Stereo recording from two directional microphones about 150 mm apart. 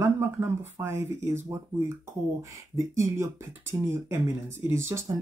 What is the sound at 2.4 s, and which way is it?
Speech, 20° right (ahead or behind).